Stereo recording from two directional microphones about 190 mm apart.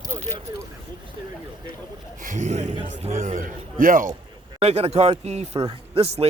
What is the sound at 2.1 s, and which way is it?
Speech, 45° right (ahead or behind).